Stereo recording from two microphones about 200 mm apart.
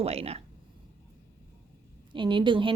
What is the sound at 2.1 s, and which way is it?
Speech, 25° right (ahead or behind).